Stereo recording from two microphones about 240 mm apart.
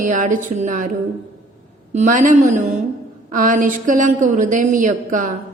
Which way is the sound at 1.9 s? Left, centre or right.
Right.